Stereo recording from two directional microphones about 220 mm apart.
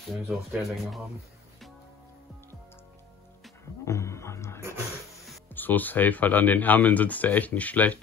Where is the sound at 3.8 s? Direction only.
15° left (ahead or behind).